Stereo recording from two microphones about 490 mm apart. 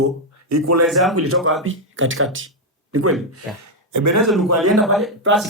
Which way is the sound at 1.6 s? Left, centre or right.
Right.